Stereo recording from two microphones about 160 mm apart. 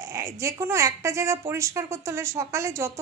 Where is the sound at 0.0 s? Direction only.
20° right (ahead or behind).